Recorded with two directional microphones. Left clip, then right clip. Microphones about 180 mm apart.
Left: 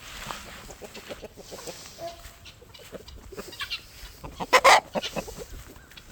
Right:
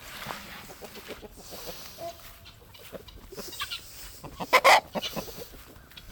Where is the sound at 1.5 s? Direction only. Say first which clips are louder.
Even; 20° right (ahead or behind).